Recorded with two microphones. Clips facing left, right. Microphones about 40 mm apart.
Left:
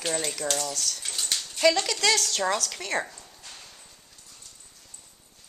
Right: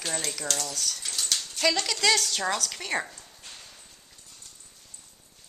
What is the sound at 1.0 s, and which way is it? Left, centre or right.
Dog, centre.